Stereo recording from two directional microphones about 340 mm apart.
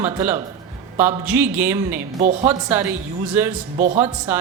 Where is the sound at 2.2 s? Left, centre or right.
Centre.